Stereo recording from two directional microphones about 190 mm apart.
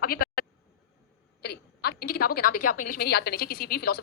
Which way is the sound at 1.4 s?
55° left (ahead or behind).